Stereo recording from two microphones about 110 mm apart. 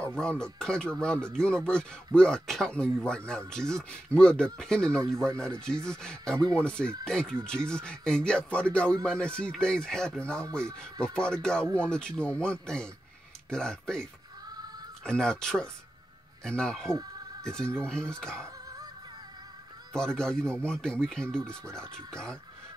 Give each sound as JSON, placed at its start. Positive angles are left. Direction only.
{"t": 0.1, "sound": "speech", "side_deg": 5}
{"t": 4.8, "sound": "speech", "side_deg": -30}
{"t": 5.4, "sound": "speech", "side_deg": 5}
{"t": 15.0, "sound": "speech", "side_deg": 5}
{"t": 20.0, "sound": "speech", "side_deg": 5}